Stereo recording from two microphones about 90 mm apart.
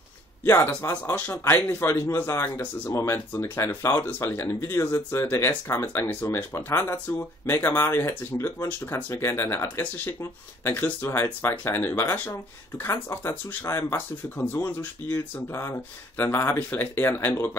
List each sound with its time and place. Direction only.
1.1 s speech: 20° left (ahead or behind)
1.4 s speech: 30° left (ahead or behind)